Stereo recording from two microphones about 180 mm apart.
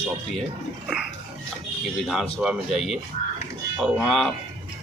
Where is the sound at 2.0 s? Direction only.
Centre (ahead or behind).